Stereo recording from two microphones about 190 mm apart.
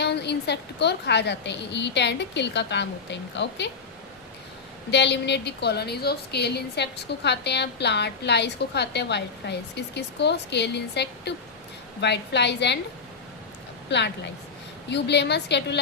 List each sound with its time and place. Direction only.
0.0 s a woman's voice: 60° left (ahead or behind)
4.9 s a woman's voice: 65° left (ahead or behind)
13.9 s a woman's voice: 65° left (ahead or behind)